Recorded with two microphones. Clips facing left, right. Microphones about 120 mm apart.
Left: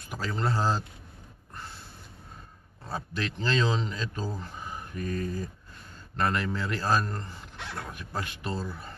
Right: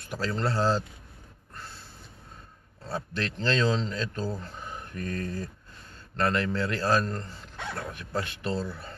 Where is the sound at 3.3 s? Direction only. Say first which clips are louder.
Right 2 dB; 10° left (ahead or behind).